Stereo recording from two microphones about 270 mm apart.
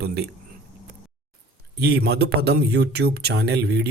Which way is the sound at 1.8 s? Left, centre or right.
Right.